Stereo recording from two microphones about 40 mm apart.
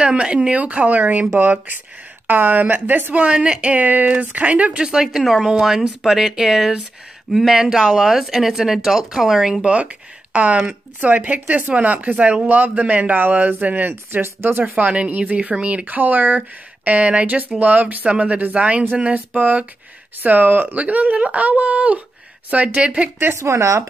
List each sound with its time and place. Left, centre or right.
0.0 s speech: right
3.3 s speech: right
3.6 s speech: right
4.8 s speech: centre
9.7 s speech: right
14.2 s speech: right
14.6 s speech: right
19.1 s speech: right
22.8 s speech: right